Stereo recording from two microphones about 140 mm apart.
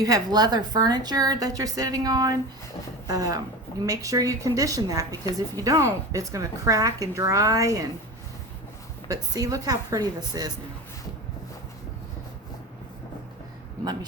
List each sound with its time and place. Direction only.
0.0 s a woman's voice: 25° right (ahead or behind)
9.0 s a woman's voice: 25° right (ahead or behind)